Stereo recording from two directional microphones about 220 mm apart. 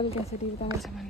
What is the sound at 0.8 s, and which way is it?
Speech, centre (ahead or behind).